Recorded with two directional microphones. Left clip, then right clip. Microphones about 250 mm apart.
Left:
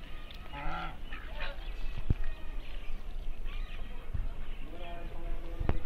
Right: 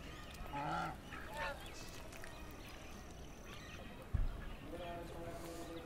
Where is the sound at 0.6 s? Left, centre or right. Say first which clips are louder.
Left 2 dB; left.